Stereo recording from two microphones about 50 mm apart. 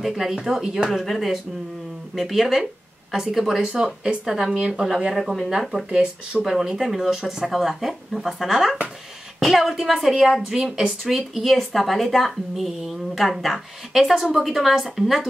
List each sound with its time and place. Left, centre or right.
0.0 s speech: centre
3.6 s speech: centre